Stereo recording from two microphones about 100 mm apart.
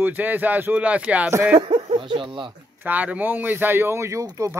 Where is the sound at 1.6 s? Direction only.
70° right (ahead or behind).